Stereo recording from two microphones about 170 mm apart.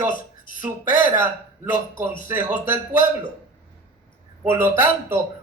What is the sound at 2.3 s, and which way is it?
Speech, 15° right (ahead or behind).